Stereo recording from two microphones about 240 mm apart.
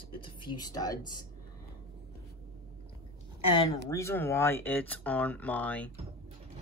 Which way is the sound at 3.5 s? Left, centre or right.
Centre.